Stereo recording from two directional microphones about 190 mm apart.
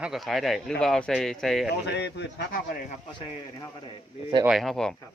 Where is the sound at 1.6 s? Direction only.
65° left (ahead or behind).